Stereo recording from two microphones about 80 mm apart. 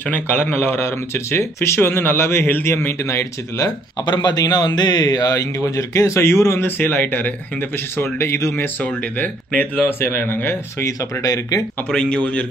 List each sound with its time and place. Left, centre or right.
0.1 s speech: left
4.0 s speech: left
8.0 s speech: left
8.8 s speech: centre
10.8 s speech: left
11.9 s speech: centre